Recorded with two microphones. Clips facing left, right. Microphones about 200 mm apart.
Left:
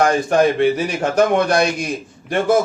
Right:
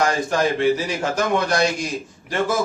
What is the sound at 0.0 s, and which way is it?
A man's voice, 60° left (ahead or behind).